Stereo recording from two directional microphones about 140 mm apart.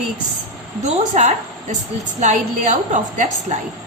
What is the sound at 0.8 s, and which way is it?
A woman's voice, 60° right (ahead or behind).